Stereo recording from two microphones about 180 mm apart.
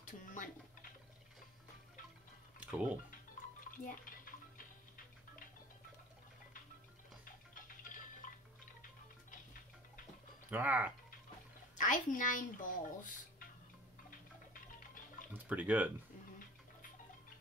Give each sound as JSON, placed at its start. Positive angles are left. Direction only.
{"t": 0.0, "sound": "a sound", "side_deg": 45}
{"t": 2.6, "sound": "speech", "side_deg": -5}
{"t": 3.7, "sound": "music", "side_deg": 50}
{"t": 7.5, "sound": "tick-tock", "side_deg": 50}
{"t": 10.5, "sound": "speech", "side_deg": -10}
{"t": 11.7, "sound": "speech", "side_deg": 45}
{"t": 14.5, "sound": "music", "side_deg": 50}
{"t": 15.3, "sound": "speech", "side_deg": -10}